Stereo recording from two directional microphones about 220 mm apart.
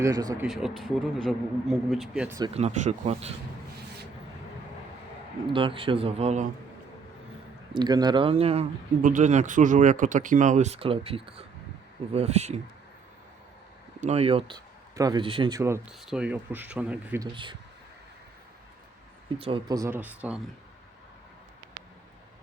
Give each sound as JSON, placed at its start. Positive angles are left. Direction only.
{"t": 0.0, "sound": "speech", "side_deg": -15}
{"t": 0.4, "sound": "speech", "side_deg": 0}
{"t": 2.4, "sound": "speech", "side_deg": -30}
{"t": 5.5, "sound": "speech", "side_deg": -25}
{"t": 7.7, "sound": "speech", "side_deg": -20}
{"t": 14.0, "sound": "speech", "side_deg": -30}
{"t": 17.3, "sound": "speech", "side_deg": -20}
{"t": 19.4, "sound": "speech", "side_deg": -25}